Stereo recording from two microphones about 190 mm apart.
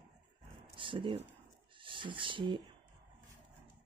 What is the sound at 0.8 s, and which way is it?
Speech, 25° right (ahead or behind).